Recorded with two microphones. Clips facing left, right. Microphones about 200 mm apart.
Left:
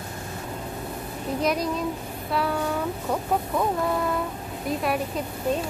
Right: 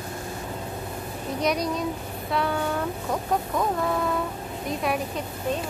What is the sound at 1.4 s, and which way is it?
Speech, 5° left (ahead or behind).